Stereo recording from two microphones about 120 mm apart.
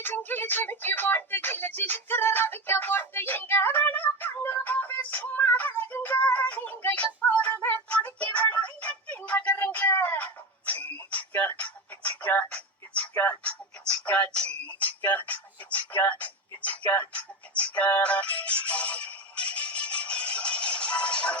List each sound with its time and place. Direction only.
0.0 s speech: 15° left (ahead or behind)
8.0 s music: 10° left (ahead or behind)